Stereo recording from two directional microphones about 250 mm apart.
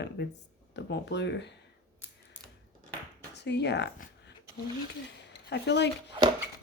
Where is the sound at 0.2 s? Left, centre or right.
Left.